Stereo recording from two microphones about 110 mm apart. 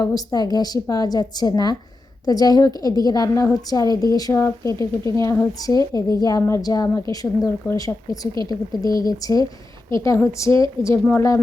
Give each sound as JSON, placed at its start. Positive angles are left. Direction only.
{"t": 0.0, "sound": "a woman's voice", "side_deg": 35}
{"t": 10.8, "sound": "speech", "side_deg": 90}